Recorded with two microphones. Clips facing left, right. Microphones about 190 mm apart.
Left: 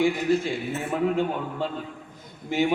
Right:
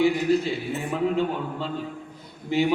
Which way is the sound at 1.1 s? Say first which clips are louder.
Right 1 dB; 45° left (ahead or behind).